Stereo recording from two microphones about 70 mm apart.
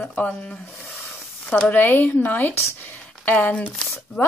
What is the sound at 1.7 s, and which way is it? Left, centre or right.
A woman's voice, left.